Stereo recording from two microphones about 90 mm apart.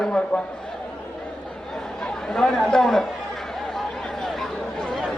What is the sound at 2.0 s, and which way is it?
Speech, 5° left (ahead or behind).